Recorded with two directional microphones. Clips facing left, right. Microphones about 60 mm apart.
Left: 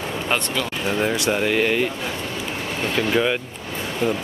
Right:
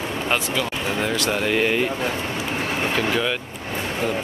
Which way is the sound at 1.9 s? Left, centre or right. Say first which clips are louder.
Right 3 dB; right.